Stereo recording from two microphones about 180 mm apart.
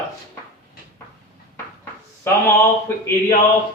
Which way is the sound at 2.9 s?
10° left (ahead or behind).